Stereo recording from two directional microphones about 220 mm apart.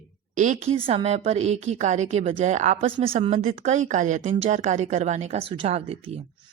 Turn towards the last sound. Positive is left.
turn(degrees=-25)  # may be behind; listen again after turning